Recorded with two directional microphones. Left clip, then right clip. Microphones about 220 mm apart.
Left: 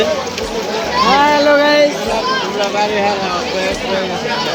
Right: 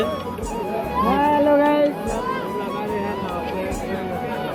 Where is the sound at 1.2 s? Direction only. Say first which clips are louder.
Left 3 dB; 20° right (ahead or behind).